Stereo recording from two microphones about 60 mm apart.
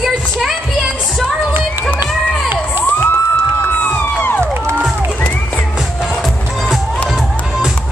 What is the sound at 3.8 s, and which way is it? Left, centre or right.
Crowd, left.